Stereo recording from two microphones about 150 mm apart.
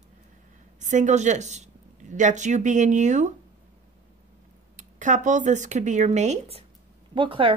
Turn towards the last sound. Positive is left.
turn(degrees=-35)  # may be behind; listen again after turning